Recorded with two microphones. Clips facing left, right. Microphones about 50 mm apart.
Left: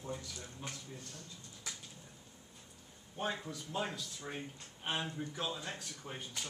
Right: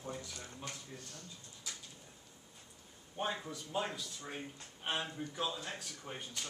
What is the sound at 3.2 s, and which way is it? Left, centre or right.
Speech, centre.